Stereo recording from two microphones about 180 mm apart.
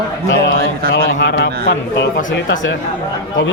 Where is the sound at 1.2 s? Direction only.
70° left (ahead or behind).